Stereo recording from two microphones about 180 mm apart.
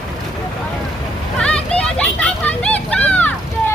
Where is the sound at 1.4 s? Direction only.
5° left (ahead or behind).